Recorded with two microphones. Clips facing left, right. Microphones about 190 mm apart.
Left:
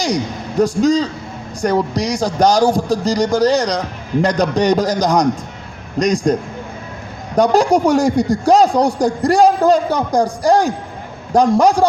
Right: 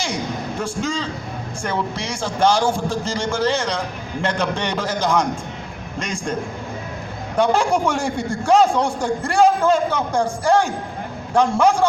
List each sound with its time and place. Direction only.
0.6 s a man's voice: 40° left (ahead or behind)
7.3 s a man's voice: 40° left (ahead or behind)